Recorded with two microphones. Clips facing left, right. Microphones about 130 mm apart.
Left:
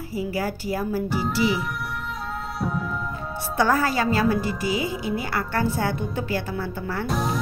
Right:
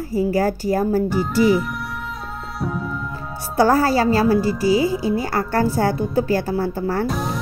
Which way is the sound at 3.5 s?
35° right (ahead or behind).